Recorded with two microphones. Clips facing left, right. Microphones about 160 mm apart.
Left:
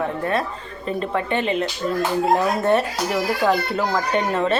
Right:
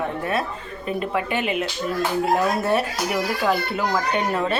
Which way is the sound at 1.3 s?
30° left (ahead or behind).